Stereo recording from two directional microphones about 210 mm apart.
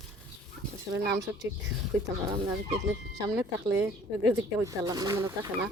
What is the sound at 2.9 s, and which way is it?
Speech, 20° right (ahead or behind).